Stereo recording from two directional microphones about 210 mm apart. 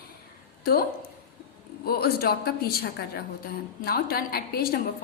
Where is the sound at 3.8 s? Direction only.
45° left (ahead or behind).